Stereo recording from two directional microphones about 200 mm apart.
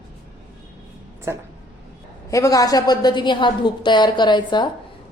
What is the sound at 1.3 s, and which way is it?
Speech, 15° right (ahead or behind).